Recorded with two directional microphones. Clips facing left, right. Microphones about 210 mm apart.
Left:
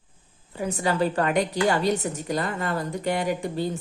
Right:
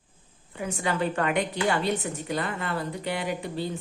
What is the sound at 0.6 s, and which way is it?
A woman's voice, 35° left (ahead or behind).